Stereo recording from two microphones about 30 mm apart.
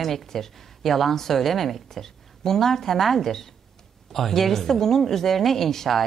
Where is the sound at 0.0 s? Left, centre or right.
Centre.